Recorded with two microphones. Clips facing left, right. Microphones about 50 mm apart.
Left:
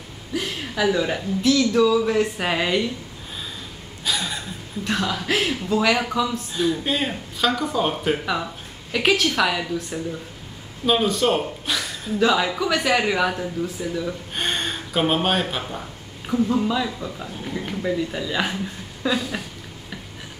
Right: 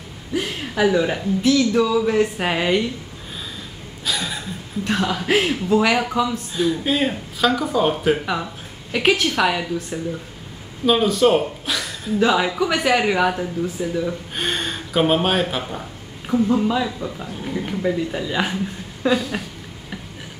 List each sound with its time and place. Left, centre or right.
0.3 s speech: centre
4.0 s a sound: centre
4.8 s speech: centre
12.2 s speech: centre
19.0 s speech: centre